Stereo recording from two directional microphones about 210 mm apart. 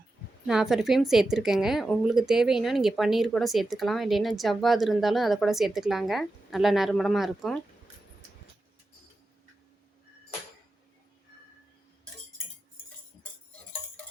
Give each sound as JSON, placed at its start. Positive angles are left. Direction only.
{"t": 0.4, "sound": "speech", "side_deg": 0}